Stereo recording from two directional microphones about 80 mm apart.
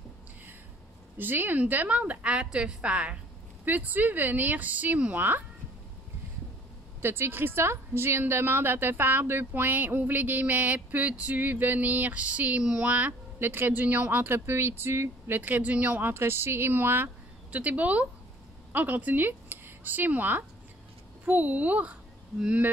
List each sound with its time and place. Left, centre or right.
1.1 s a woman's voice: right
7.0 s a woman's voice: right
16.1 s a woman's voice: right